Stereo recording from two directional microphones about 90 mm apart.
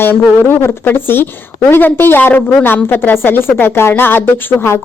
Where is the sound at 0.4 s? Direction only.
25° left (ahead or behind).